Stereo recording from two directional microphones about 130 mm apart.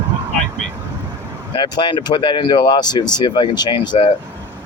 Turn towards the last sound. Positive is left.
turn(degrees=35)  # may be behind; listen again after turning